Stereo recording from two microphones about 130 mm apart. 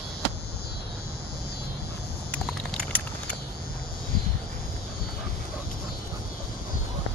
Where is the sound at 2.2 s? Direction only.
5° left (ahead or behind).